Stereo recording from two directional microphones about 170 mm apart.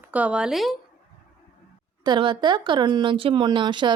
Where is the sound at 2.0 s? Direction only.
30° right (ahead or behind).